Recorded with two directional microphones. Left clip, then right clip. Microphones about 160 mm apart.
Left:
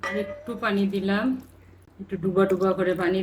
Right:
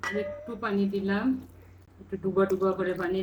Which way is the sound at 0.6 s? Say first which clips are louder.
Left 4 dB; 65° left (ahead or behind).